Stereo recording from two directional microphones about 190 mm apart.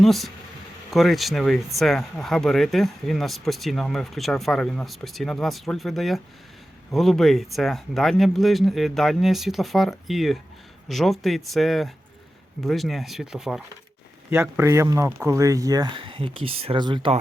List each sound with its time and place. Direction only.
0.0 s speech: centre (ahead or behind); by 17.2 s 25° right (ahead or behind)